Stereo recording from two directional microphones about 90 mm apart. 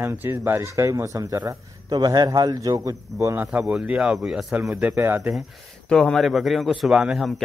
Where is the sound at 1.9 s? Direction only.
50° right (ahead or behind).